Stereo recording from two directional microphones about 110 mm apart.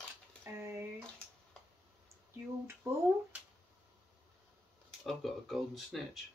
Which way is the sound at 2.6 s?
25° right (ahead or behind).